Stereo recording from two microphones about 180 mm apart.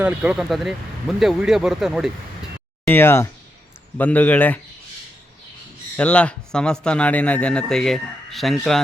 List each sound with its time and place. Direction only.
0.0 s speech: 5° right (ahead or behind)
2.8 s speech: 10° left (ahead or behind)
6.0 s speech: 5° left (ahead or behind)